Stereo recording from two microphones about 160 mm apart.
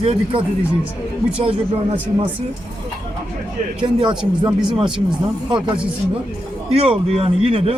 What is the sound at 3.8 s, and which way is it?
Speech, 30° right (ahead or behind).